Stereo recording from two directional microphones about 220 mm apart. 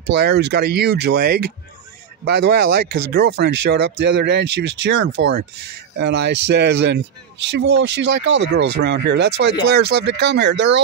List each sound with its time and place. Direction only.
0.2 s speech: 50° right (ahead or behind)